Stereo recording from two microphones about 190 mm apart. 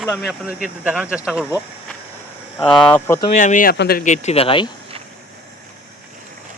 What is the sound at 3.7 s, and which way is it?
Speech, 55° left (ahead or behind).